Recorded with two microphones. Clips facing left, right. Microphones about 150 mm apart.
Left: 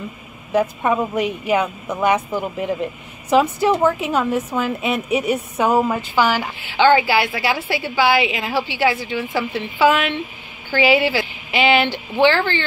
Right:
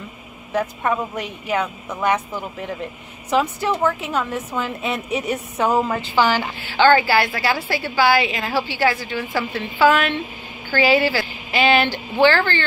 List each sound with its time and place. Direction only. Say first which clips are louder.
0.5 s a woman's voice: left 4 dB; 10° left (ahead or behind)
6.8 s a woman's voice: even; 15° left (ahead or behind)